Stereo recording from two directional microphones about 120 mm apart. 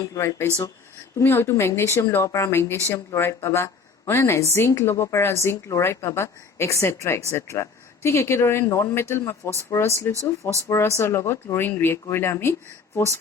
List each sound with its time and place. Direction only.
0.0 s a woman's voice: 25° left (ahead or behind)